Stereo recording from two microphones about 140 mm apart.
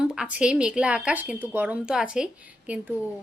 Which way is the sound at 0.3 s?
5° right (ahead or behind).